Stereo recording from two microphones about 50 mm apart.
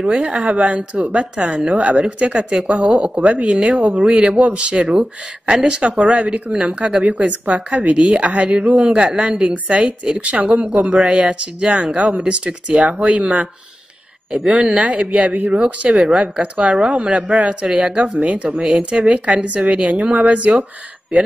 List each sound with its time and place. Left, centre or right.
0.0 s a woman's voice: centre
7.0 s a woman's voice: right
14.8 s a woman's voice: right